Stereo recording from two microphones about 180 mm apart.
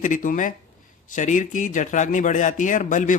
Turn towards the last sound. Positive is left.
turn(degrees=45)  # may be behind; listen again after turning